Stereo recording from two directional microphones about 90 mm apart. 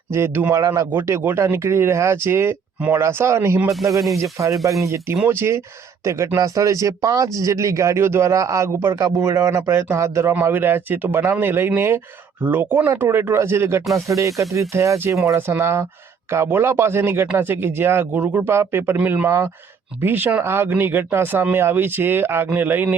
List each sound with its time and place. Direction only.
0.1 s speech: 30° right (ahead or behind)
1.2 s speech: 25° right (ahead or behind)